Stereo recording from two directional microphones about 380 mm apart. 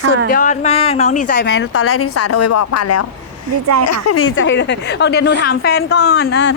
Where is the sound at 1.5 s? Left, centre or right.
Left.